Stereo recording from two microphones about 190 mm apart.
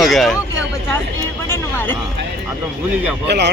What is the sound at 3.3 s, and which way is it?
Speech, 65° right (ahead or behind).